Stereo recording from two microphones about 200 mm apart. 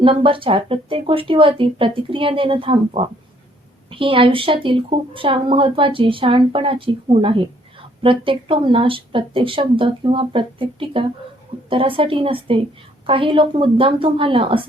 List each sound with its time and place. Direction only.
0.0 s a woman's voice: 25° right (ahead or behind)